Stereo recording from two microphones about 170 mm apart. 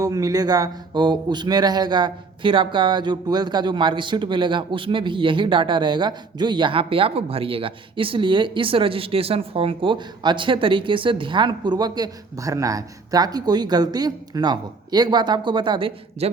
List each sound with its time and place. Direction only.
0.0 s speech: 20° right (ahead or behind)